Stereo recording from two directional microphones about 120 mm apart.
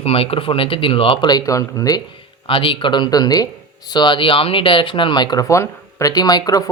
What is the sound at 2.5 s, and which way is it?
Speech, 45° left (ahead or behind).